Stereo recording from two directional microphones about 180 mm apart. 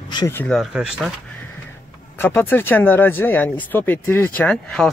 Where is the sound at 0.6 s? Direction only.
5° right (ahead or behind).